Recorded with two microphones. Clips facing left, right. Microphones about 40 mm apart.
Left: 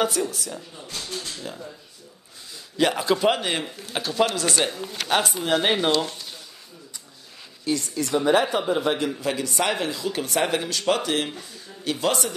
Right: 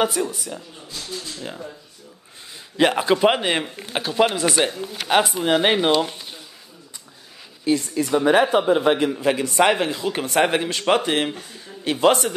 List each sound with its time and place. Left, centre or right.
0.0 s speech: centre
1.4 s speech: right
2.8 s speech: right
7.6 s a man's voice: right